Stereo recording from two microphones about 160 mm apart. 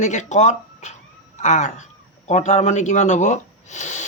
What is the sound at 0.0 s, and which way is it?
A man's voice, 50° left (ahead or behind).